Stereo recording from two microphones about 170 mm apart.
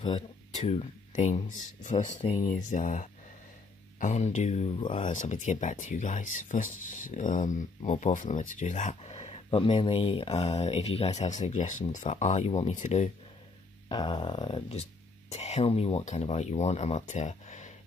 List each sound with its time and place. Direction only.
0.7 s speech: 40° left (ahead or behind)
4.8 s speech: 30° left (ahead or behind)
5.1 s speech: 45° left (ahead or behind)
13.8 s speech: 30° left (ahead or behind); by 17.7 s 45° left (ahead or behind)